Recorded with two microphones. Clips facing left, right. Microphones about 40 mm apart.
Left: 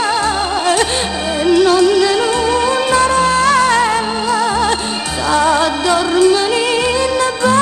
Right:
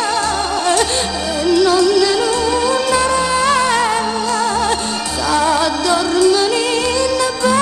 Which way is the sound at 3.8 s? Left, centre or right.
Centre.